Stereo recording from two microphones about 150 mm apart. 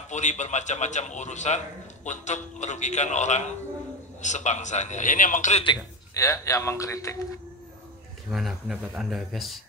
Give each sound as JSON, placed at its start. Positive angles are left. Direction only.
{"t": 0.1, "sound": "a man's voice", "side_deg": 50}
{"t": 6.1, "sound": "a man's voice", "side_deg": 20}
{"t": 8.3, "sound": "speech", "side_deg": 0}